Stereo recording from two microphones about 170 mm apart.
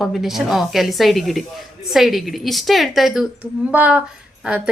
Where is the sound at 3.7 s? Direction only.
10° right (ahead or behind).